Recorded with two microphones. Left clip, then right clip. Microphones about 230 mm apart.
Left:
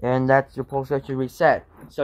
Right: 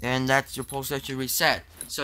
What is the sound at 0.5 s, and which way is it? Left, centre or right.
Speech, right.